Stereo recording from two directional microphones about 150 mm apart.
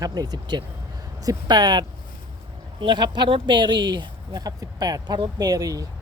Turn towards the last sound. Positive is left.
turn(degrees=-25)  # may be behind; listen again after turning